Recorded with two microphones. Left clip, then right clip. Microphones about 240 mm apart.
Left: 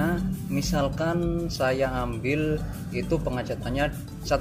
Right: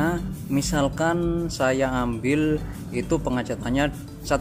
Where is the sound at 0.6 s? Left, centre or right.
Right.